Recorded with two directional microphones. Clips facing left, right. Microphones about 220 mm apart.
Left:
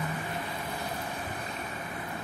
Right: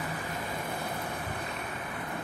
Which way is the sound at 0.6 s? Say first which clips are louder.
Right 1 dB; 55° right (ahead or behind).